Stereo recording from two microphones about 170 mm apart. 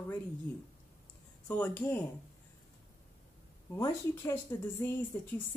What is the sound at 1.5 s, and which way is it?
Speech, 10° left (ahead or behind).